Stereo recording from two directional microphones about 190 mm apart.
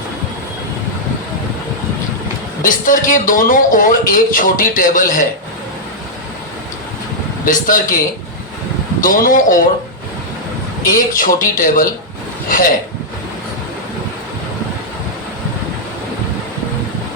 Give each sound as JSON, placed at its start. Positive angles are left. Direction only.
{"t": 2.6, "sound": "a man's voice", "side_deg": 45}
{"t": 7.4, "sound": "a man's voice", "side_deg": 45}
{"t": 9.0, "sound": "a man's voice", "side_deg": 45}
{"t": 10.8, "sound": "a man's voice", "side_deg": 45}